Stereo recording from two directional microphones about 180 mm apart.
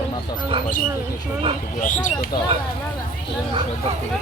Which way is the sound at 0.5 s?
30° right (ahead or behind).